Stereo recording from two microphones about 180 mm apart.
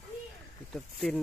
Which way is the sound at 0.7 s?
5° left (ahead or behind).